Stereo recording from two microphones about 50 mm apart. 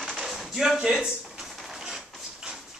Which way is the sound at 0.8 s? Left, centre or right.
Centre.